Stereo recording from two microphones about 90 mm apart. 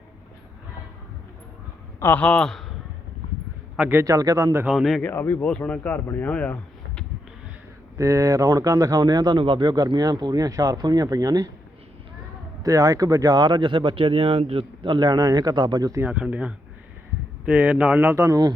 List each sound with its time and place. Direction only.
2.0 s a man's voice: 25° left (ahead or behind)
2.2 s speech: 10° left (ahead or behind)
3.8 s a man's voice: 20° right (ahead or behind)
4.0 s a man's voice: 40° right (ahead or behind)
4.6 s speech: 5° right (ahead or behind)
5.0 s speech: 25° left (ahead or behind)
5.5 s speech: 10° left (ahead or behind)
7.9 s speech: 40° right (ahead or behind)
12.6 s speech: 40° right (ahead or behind)
16.1 s speech: 15° right (ahead or behind)
18.3 s speech: 50° right (ahead or behind)